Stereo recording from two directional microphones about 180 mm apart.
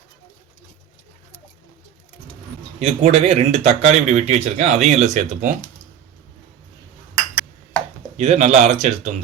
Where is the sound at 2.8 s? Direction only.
35° right (ahead or behind).